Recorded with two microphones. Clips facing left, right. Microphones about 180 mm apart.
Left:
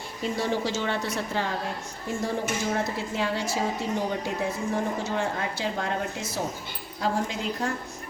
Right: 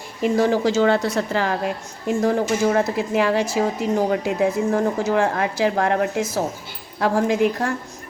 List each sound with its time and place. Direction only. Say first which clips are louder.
0.2 s a woman's voice: right 9 dB; 90° right